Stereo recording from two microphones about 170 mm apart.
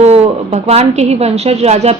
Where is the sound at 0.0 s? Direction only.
40° right (ahead or behind).